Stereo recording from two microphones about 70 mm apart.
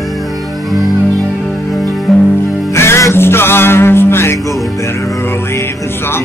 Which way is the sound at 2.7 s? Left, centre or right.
Left.